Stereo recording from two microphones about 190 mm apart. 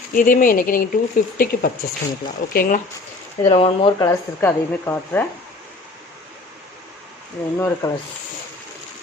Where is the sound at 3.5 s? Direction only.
30° left (ahead or behind).